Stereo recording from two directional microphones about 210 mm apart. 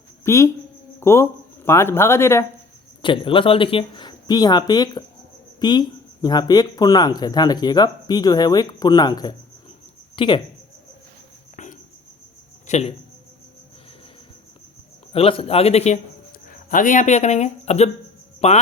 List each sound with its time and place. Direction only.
0.3 s a man's voice: 15° left (ahead or behind)
3.0 s speech: 25° left (ahead or behind)
12.6 s speech: 30° left (ahead or behind)
15.1 s speech: 25° left (ahead or behind)